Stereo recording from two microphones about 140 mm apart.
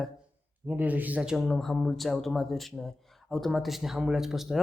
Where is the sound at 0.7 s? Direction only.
10° right (ahead or behind).